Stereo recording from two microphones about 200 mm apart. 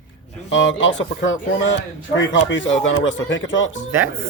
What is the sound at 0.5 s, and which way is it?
Speech, 70° left (ahead or behind).